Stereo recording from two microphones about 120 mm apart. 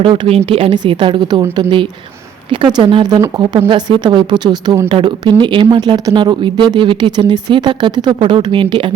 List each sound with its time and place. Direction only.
0.0 s a woman's voice: 50° right (ahead or behind)